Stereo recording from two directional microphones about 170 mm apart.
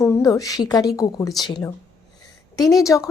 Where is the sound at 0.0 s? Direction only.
20° left (ahead or behind).